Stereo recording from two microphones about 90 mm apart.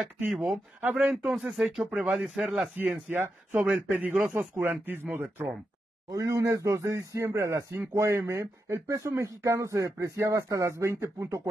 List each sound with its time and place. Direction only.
0.3 s speech: 5° right (ahead or behind)
3.1 s speech: 20° right (ahead or behind)
6.0 s speech: 35° right (ahead or behind)